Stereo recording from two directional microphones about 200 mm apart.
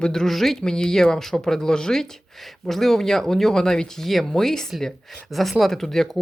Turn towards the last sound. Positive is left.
turn(degrees=0)  # may be behind; listen again after turning